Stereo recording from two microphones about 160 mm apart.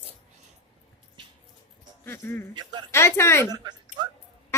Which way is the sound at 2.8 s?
15° left (ahead or behind).